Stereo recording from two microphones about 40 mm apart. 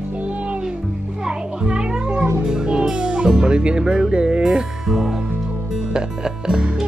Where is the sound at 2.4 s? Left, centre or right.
Centre.